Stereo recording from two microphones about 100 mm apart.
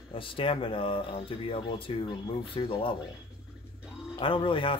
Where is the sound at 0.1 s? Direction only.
60° left (ahead or behind).